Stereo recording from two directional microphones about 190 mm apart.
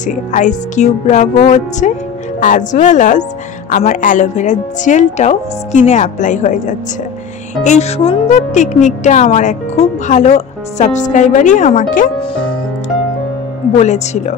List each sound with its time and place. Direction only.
0.0 s speech: 40° left (ahead or behind)
13.7 s speech: 35° left (ahead or behind)